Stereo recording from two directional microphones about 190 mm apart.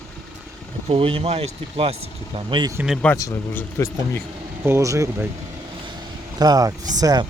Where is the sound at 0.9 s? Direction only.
30° right (ahead or behind).